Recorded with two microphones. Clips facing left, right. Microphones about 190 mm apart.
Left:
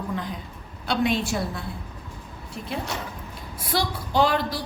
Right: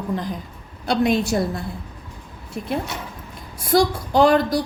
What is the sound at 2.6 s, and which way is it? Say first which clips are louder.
A woman's voice: right 5 dB; 50° right (ahead or behind).